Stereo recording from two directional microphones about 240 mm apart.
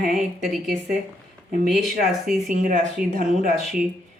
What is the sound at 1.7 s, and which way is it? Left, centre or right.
Speech, centre.